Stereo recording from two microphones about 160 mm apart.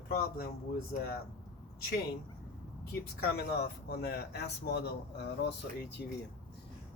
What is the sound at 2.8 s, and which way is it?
Speech, 75° left (ahead or behind).